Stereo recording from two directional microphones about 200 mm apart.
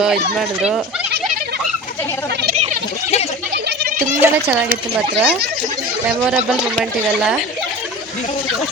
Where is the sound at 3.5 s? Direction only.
45° right (ahead or behind).